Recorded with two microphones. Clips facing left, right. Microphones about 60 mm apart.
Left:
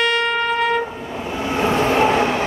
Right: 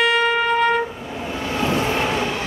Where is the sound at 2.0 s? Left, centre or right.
Left.